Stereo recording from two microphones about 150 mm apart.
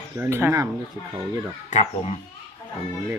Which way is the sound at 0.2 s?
15° right (ahead or behind).